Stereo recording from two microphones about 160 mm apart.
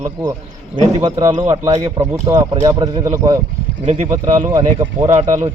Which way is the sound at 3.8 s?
45° right (ahead or behind).